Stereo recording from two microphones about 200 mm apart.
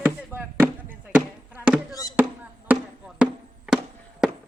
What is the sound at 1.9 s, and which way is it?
Music, 20° left (ahead or behind).